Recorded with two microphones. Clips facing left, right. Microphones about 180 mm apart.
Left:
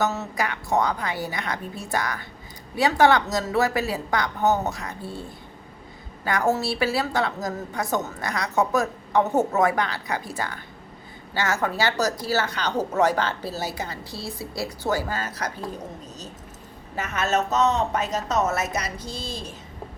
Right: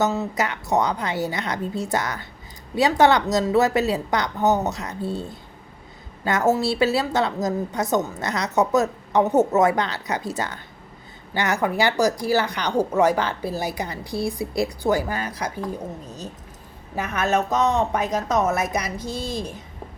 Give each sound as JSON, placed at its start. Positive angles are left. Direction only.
{"t": 0.0, "sound": "a woman's voice", "side_deg": -15}
{"t": 6.2, "sound": "a woman's voice", "side_deg": -20}
{"t": 16.9, "sound": "a woman's voice", "side_deg": -15}